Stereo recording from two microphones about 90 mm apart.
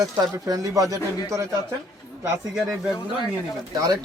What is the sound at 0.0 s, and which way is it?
Speech, 45° right (ahead or behind).